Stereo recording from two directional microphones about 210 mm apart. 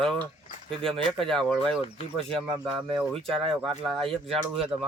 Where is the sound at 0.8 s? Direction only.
Centre (ahead or behind).